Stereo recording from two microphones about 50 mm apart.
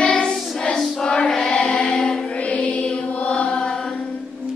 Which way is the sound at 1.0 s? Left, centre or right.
Centre.